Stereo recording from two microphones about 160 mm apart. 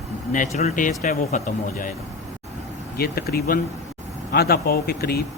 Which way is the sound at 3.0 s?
70° left (ahead or behind).